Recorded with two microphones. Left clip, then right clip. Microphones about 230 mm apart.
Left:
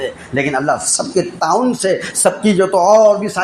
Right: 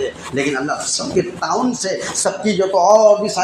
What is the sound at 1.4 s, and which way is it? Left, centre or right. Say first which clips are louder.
Speech: left 5 dB; left.